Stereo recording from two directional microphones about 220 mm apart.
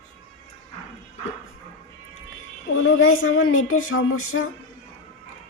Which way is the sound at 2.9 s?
70° left (ahead or behind).